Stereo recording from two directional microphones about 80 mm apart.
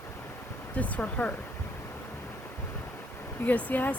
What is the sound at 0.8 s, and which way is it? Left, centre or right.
Speech, centre.